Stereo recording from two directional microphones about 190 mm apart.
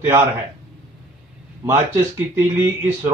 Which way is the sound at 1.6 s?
15° right (ahead or behind).